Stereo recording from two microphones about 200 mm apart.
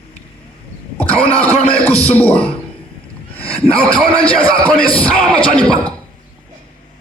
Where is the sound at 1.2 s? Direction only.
30° left (ahead or behind).